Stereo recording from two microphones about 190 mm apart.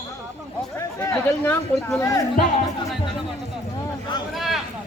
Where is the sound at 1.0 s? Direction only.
10° left (ahead or behind).